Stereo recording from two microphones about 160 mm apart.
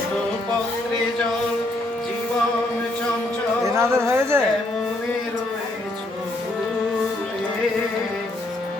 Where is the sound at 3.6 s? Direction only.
15° right (ahead or behind).